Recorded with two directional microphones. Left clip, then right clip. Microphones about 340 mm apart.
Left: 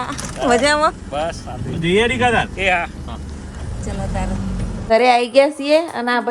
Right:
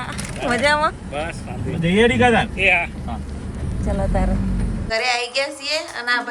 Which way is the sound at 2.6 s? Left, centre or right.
Centre.